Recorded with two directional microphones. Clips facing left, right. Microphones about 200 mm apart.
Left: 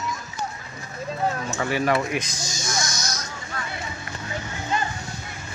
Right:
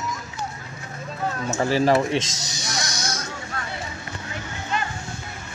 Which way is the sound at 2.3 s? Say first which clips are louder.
Left 2 dB; 70° right (ahead or behind).